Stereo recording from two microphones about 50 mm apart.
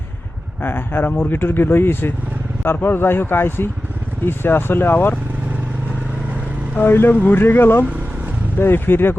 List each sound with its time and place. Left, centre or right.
0.6 s speech: left
6.7 s speech: left